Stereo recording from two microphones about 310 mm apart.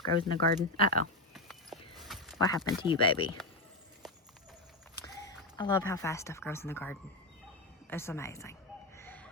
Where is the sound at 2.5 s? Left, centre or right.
Centre.